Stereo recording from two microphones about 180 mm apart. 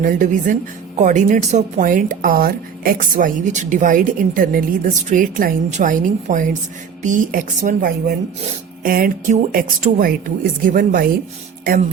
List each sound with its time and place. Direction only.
0.0 s a woman's voice: 50° right (ahead or behind)